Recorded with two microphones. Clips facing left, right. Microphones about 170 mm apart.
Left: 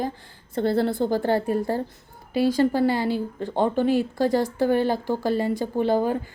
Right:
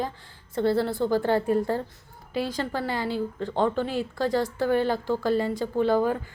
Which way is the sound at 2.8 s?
35° left (ahead or behind).